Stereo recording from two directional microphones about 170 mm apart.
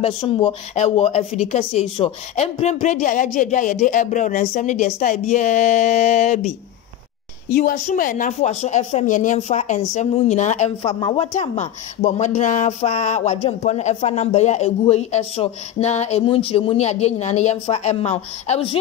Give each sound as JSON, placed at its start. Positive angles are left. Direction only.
{"t": 0.0, "sound": "speech", "side_deg": 30}
{"t": 7.4, "sound": "a woman's voice", "side_deg": 60}
{"t": 11.3, "sound": "speech", "side_deg": 40}